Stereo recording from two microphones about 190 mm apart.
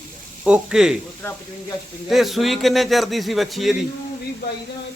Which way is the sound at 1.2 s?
10° left (ahead or behind).